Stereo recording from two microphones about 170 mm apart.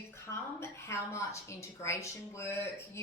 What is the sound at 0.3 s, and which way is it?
A woman's voice, 15° left (ahead or behind).